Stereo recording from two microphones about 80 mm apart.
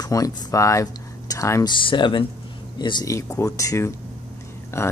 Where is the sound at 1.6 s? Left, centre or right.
Left.